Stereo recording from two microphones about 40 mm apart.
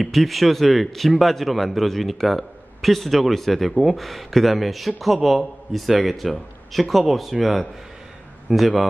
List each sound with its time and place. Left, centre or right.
0.0 s speech: centre